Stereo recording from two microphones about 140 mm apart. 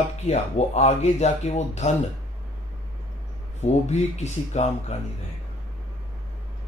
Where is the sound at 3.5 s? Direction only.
55° left (ahead or behind).